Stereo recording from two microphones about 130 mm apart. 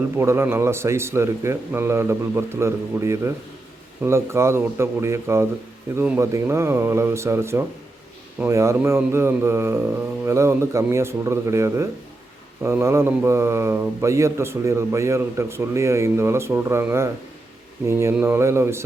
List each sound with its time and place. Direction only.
0.2 s speech: 20° right (ahead or behind)